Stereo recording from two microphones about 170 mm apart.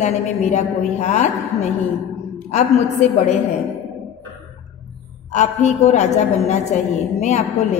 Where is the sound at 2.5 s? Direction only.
40° left (ahead or behind).